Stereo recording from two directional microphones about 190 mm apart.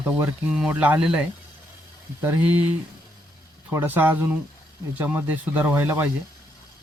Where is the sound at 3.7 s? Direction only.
10° right (ahead or behind).